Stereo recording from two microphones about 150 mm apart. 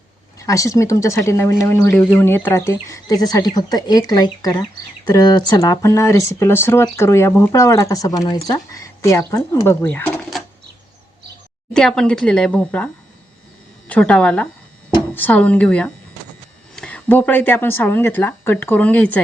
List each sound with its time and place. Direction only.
0.3 s speech: 20° left (ahead or behind)
11.7 s a woman's voice: 5° left (ahead or behind)